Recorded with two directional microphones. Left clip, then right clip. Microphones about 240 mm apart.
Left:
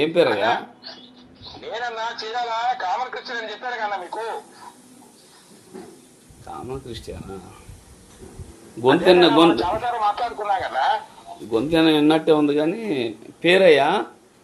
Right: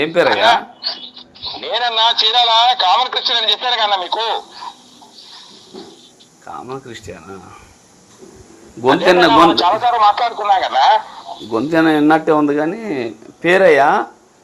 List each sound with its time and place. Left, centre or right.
0.0 s speech: centre
0.3 s speech: right
6.5 s speech: centre
8.8 s a man's voice: right
11.4 s a man's voice: centre